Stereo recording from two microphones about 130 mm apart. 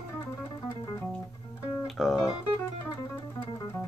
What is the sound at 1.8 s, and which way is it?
Music, centre (ahead or behind).